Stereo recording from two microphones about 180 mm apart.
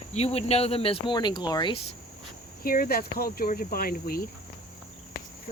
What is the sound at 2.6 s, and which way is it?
Cricket, 55° left (ahead or behind).